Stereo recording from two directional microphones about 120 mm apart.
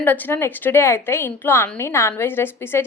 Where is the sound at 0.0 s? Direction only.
15° left (ahead or behind).